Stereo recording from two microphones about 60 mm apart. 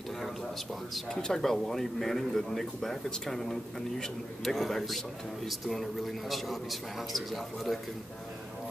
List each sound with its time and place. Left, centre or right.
0.9 s a man's voice: centre